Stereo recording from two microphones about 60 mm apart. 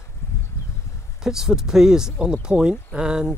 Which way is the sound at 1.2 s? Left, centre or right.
Centre.